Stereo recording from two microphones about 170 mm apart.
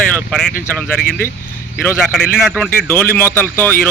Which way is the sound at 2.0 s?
Centre (ahead or behind).